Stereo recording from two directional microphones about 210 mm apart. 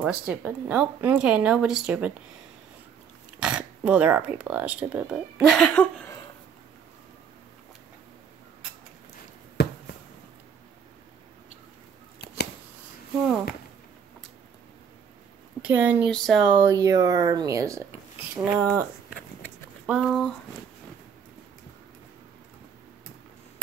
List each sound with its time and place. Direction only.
0.0 s speech: 5° right (ahead or behind)
3.3 s speech: 5° right (ahead or behind)
9.6 s a sound: 50° left (ahead or behind)
15.6 s speech: 10° right (ahead or behind)
19.9 s speech: centre (ahead or behind)